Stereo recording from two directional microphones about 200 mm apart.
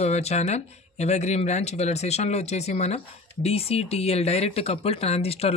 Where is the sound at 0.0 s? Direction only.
35° left (ahead or behind).